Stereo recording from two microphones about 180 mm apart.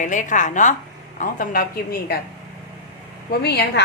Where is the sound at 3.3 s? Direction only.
65° left (ahead or behind).